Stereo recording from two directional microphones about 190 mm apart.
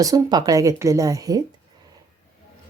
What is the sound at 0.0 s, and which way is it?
A woman's voice, 20° right (ahead or behind).